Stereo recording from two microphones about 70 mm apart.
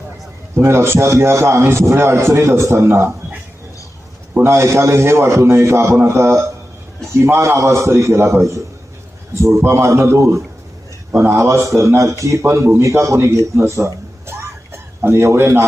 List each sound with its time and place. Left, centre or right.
0.5 s a man's voice: right
4.4 s a man's voice: right